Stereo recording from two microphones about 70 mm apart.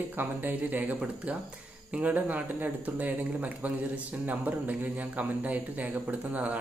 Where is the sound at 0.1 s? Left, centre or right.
Right.